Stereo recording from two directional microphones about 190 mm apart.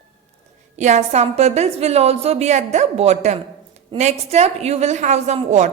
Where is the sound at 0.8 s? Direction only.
40° right (ahead or behind).